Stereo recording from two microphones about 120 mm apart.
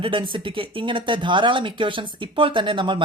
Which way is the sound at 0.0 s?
45° right (ahead or behind).